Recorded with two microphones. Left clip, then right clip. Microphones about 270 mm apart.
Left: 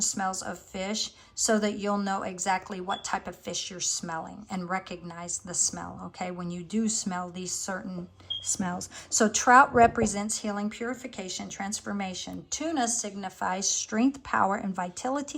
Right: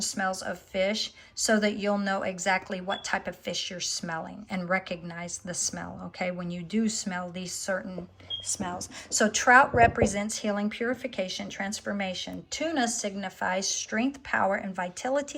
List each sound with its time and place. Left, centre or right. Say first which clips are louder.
0.0 s speech: even; centre